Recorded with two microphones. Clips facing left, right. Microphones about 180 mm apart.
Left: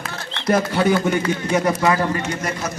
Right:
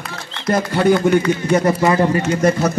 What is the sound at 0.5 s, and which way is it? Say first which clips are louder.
Speech: right 2 dB; centre (ahead or behind).